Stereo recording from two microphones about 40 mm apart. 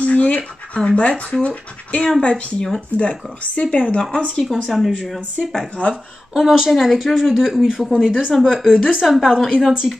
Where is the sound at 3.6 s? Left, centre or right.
Left.